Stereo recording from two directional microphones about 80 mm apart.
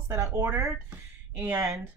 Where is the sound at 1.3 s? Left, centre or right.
Right.